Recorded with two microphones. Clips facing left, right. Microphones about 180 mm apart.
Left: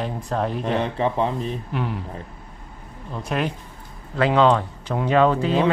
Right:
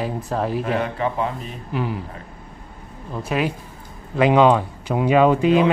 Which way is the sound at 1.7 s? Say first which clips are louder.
Right 5 dB; centre (ahead or behind).